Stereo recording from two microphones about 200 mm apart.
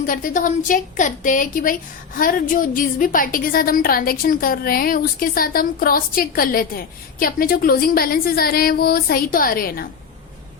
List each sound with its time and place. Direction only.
0.0 s a woman's voice: 45° left (ahead or behind)